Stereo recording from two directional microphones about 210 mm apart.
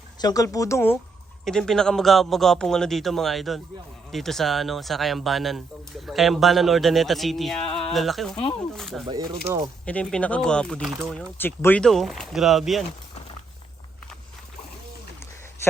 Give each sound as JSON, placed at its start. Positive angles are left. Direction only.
{"t": 0.2, "sound": "speech", "side_deg": 15}
{"t": 9.0, "sound": "speech", "side_deg": -15}
{"t": 9.8, "sound": "speech", "side_deg": 5}